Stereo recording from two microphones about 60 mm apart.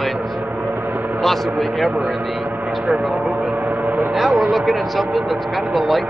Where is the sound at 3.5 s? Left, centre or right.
Right.